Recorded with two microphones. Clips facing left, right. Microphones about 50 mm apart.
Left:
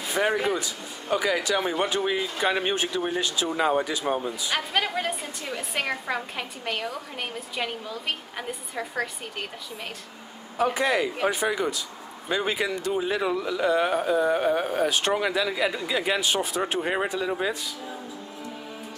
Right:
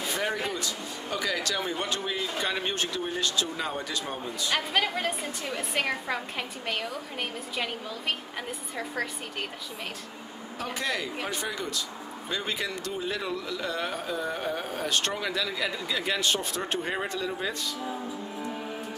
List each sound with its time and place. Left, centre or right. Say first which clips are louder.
0.1 s speech: left 8 dB; centre
4.6 s a woman's voice: left 1 dB; centre
10.6 s speech: left 8 dB; centre